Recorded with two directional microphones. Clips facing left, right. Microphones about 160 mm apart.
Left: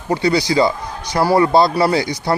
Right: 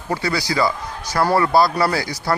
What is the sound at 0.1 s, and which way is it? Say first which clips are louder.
Speech: left 6 dB; 20° left (ahead or behind).